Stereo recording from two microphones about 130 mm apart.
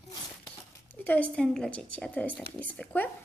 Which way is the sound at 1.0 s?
10° left (ahead or behind).